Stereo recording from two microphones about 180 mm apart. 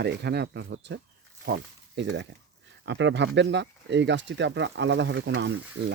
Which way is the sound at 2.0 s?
75° right (ahead or behind).